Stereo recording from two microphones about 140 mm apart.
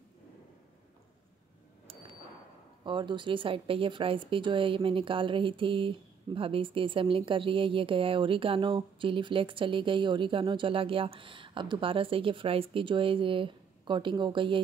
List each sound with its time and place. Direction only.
2.8 s speech: 35° right (ahead or behind)